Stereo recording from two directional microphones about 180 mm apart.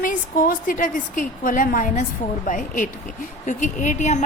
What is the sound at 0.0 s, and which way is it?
A woman's voice, 50° left (ahead or behind).